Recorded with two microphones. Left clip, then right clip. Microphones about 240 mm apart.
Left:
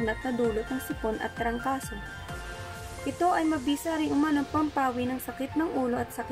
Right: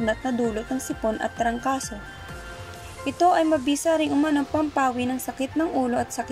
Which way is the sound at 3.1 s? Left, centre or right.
Right.